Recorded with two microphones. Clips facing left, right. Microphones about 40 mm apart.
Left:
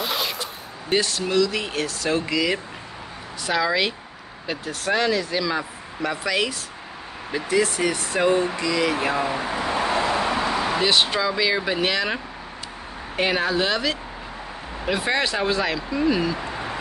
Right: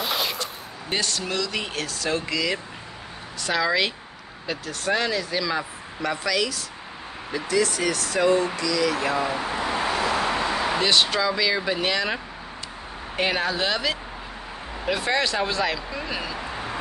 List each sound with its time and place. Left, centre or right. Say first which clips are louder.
0.0 s speech: even; centre
6.3 s speech: left 1 dB; left; by 16.3 s centre